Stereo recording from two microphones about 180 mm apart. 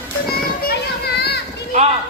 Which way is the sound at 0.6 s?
60° left (ahead or behind).